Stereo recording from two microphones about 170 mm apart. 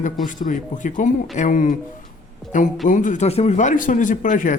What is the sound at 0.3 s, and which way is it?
Speech, 50° left (ahead or behind).